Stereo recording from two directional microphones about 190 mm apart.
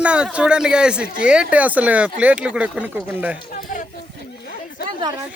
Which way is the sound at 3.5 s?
45° left (ahead or behind).